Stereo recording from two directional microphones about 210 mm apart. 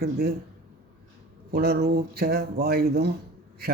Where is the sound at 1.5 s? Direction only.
50° right (ahead or behind).